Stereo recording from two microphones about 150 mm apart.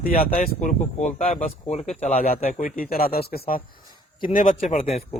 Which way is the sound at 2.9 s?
85° left.